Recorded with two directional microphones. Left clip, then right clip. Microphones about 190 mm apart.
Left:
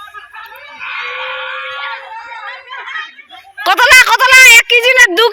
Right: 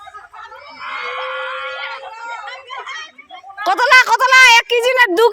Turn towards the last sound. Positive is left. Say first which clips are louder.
# left 4 dB
turn(degrees=-20)  # may be behind; listen again after turning